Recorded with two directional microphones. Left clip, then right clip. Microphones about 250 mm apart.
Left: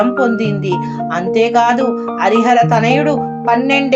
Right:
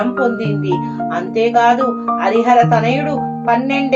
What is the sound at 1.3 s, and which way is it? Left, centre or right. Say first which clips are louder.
Speech: even; centre.